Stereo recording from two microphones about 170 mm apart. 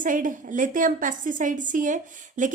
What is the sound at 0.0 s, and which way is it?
A woman's voice, 50° right (ahead or behind).